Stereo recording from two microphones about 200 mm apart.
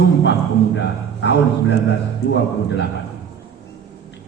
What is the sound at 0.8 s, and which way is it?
Speech, 60° left (ahead or behind).